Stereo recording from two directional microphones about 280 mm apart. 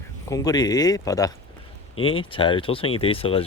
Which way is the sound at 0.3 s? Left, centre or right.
Centre.